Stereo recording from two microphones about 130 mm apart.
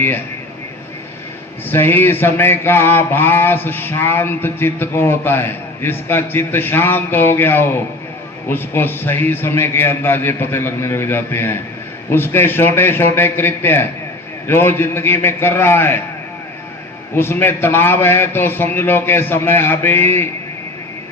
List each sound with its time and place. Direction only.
1.7 s mantra: 15° left (ahead or behind)
17.2 s mantra: 15° left (ahead or behind)